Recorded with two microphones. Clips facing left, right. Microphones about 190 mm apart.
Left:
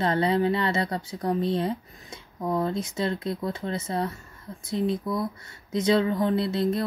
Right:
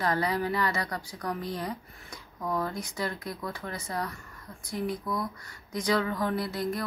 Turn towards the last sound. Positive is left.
turn(degrees=25)  # may be behind; listen again after turning